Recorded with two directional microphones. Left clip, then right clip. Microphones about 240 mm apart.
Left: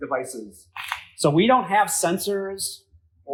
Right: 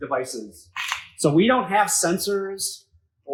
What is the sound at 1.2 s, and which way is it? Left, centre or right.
Speech, centre.